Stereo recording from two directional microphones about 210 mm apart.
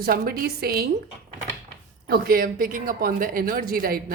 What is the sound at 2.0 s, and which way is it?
A woman's voice, 45° right (ahead or behind).